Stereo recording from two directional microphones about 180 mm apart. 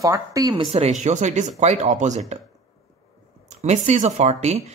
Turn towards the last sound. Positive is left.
turn(degrees=-35)  # may be behind; listen again after turning